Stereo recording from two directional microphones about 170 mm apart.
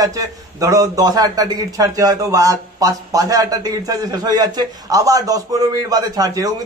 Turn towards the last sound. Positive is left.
turn(degrees=-20)  # may be behind; listen again after turning